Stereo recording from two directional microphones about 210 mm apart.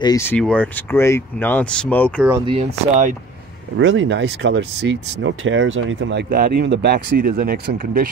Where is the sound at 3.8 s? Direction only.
65° right (ahead or behind).